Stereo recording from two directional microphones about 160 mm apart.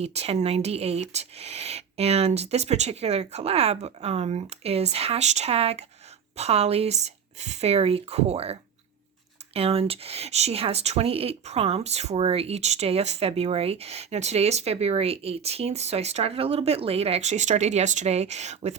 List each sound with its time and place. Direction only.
0.0 s speech: 40° right (ahead or behind)